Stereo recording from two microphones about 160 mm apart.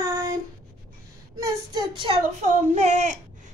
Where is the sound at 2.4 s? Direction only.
45° right (ahead or behind).